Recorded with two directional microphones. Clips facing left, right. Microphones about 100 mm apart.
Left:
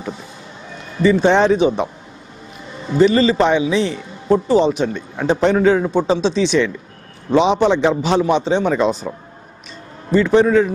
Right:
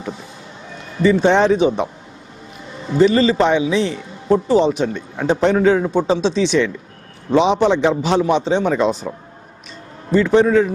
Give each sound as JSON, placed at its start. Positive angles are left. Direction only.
{"t": 1.0, "sound": "a man's voice", "side_deg": 15}
{"t": 3.0, "sound": "a man's voice", "side_deg": 15}
{"t": 10.1, "sound": "a man's voice", "side_deg": 15}